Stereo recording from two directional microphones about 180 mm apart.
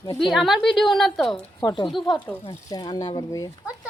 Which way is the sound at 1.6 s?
25° left (ahead or behind).